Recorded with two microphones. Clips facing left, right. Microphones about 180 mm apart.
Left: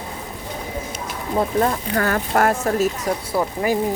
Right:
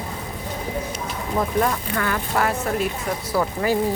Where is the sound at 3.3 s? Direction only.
15° left (ahead or behind).